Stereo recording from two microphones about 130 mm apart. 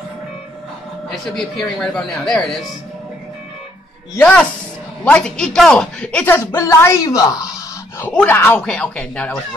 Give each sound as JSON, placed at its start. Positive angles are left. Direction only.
{"t": 1.1, "sound": "speech", "side_deg": 0}
{"t": 4.1, "sound": "speech", "side_deg": 10}
{"t": 6.4, "sound": "speech", "side_deg": 25}
{"t": 8.1, "sound": "speech", "side_deg": 10}